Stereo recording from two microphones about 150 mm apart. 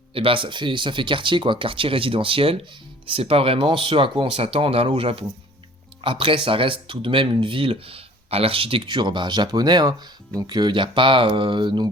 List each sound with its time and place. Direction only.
0.1 s speech: 35° right (ahead or behind)